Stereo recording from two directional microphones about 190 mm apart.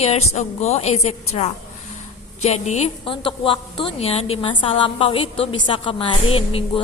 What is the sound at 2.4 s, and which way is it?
Speech, 35° left (ahead or behind).